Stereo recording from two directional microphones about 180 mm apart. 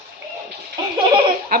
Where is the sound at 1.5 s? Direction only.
55° right (ahead or behind).